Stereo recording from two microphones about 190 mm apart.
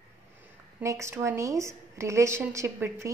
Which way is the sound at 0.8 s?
15° right (ahead or behind).